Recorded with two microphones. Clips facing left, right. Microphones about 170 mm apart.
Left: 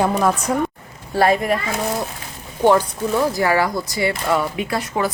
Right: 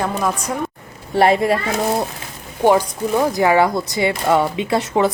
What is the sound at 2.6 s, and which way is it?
Speech, 15° right (ahead or behind).